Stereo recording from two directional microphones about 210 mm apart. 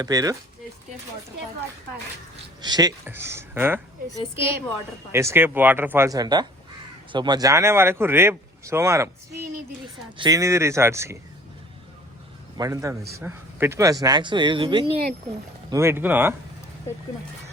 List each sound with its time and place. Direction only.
0.0 s speech: 15° right (ahead or behind)
2.6 s speech: 20° right (ahead or behind)
5.1 s speech: 10° right (ahead or behind)
12.5 s speech: 15° right (ahead or behind)
15.7 s speech: 10° right (ahead or behind)